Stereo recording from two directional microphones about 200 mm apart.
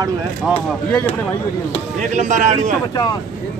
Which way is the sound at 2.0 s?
35° right (ahead or behind).